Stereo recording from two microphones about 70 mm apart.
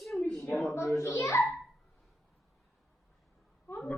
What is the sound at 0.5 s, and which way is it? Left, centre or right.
Speech, left.